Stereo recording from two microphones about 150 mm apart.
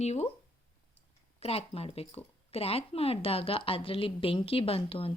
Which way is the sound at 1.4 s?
40° left (ahead or behind).